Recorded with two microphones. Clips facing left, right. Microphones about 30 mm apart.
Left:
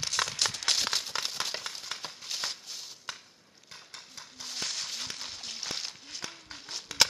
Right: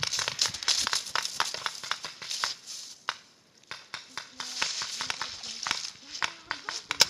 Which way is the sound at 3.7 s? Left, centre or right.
Right.